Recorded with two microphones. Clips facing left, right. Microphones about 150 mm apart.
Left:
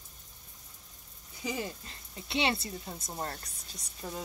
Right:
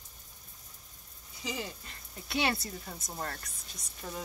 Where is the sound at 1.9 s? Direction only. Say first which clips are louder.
Left 1 dB; 25° left (ahead or behind).